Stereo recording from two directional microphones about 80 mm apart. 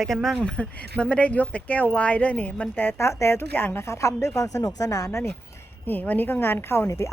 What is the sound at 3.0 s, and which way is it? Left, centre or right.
Speech, left.